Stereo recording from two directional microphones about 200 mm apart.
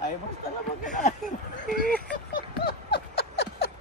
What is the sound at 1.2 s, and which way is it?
Sheep, 45° right (ahead or behind).